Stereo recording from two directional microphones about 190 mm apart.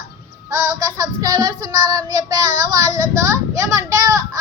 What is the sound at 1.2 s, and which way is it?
Child singing, 20° right (ahead or behind).